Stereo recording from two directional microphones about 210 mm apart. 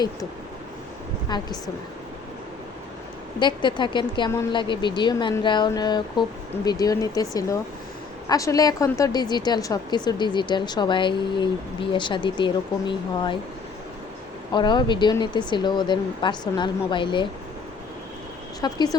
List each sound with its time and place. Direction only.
1.3 s a woman's voice: 20° left (ahead or behind)
3.4 s a woman's voice: 20° left (ahead or behind)
14.5 s a woman's voice: 20° left (ahead or behind)
18.6 s a woman's voice: 20° left (ahead or behind)